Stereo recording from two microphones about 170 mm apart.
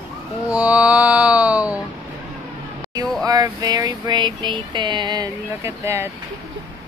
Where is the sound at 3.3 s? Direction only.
25° right (ahead or behind).